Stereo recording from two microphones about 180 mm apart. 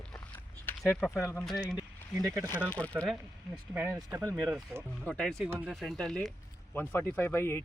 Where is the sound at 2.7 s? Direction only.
10° left (ahead or behind).